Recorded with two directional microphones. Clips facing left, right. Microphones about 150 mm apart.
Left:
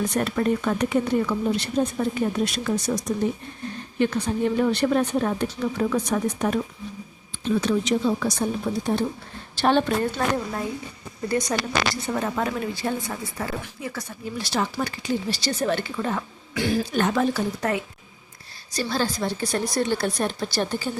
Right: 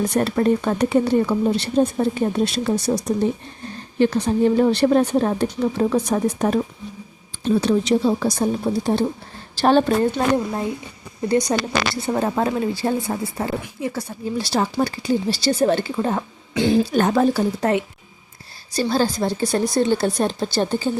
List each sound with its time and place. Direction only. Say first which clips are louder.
0.1 s speech: right 5 dB; 35° right (ahead or behind)
10.2 s a woman's voice: right 5 dB; 25° right (ahead or behind)
16.9 s a woman's voice: right 5 dB; 40° right (ahead or behind)